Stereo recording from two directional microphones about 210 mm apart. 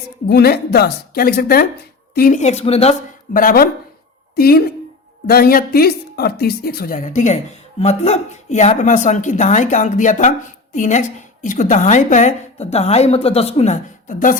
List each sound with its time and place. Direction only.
0.3 s a woman's voice: 50° left (ahead or behind); by 2.9 s 30° left (ahead or behind)
3.3 s a woman's voice: 45° left (ahead or behind)